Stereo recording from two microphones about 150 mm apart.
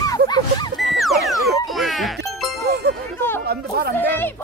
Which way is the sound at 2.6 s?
90° right.